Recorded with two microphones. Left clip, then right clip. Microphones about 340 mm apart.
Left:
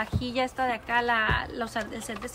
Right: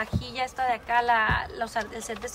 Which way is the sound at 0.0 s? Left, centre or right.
Centre.